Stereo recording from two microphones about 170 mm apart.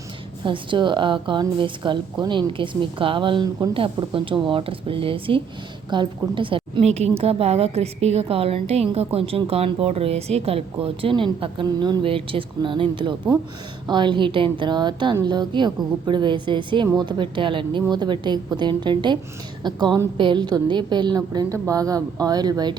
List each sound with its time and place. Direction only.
0.4 s a woman's voice: 30° right (ahead or behind)